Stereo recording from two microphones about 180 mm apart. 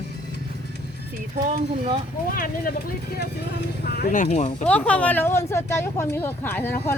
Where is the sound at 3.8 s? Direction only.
65° left (ahead or behind).